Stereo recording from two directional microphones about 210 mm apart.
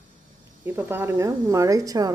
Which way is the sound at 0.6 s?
10° right (ahead or behind).